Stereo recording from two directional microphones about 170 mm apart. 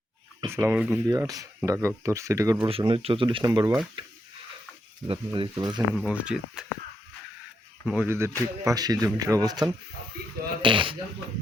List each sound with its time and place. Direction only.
0.5 s speech: 10° right (ahead or behind)
1.0 s speech: 20° right (ahead or behind)
2.6 s speech: 30° right (ahead or behind)
4.0 s a sound: 30° right (ahead or behind)
5.0 s speech: 30° right (ahead or behind)
5.9 s speech: 5° right (ahead or behind)
7.9 s speech: 10° right (ahead or behind); by 10.9 s 30° right (ahead or behind)